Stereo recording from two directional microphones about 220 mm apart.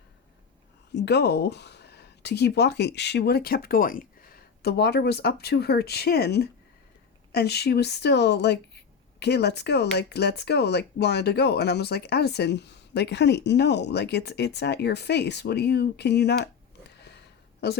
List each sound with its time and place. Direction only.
0.9 s speech: 50° left (ahead or behind)
17.6 s speech: 45° left (ahead or behind)